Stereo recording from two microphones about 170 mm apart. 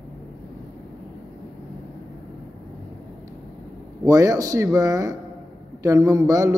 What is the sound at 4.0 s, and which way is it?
A man's voice, 20° right (ahead or behind).